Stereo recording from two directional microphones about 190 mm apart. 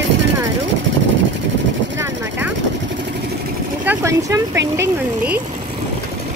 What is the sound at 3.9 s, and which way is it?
Speech, 10° right (ahead or behind).